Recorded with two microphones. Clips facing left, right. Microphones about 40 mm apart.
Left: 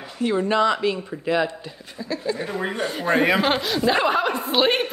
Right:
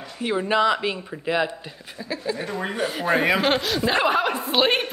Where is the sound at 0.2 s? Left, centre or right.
Centre.